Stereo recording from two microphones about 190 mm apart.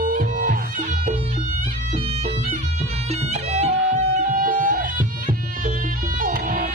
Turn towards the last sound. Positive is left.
turn(degrees=-50)  # may be behind; listen again after turning